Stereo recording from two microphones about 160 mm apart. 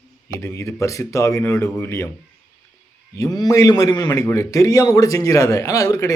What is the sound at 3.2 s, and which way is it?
A man's voice, 25° left (ahead or behind).